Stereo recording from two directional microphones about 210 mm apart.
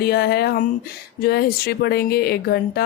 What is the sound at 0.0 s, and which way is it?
A woman's voice, 50° left (ahead or behind).